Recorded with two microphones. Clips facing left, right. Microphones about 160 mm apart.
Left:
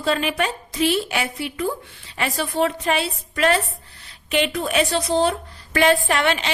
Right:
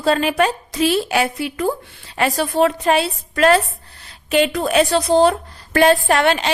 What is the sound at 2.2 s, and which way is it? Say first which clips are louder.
Speech: right 5 dB; 40° right (ahead or behind).